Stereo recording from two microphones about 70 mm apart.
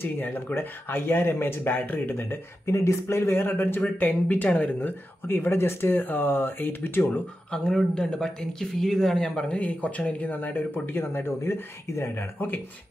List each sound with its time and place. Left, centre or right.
0.0 s speech: left
2.7 s speech: left
7.5 s speech: centre; by 12.5 s left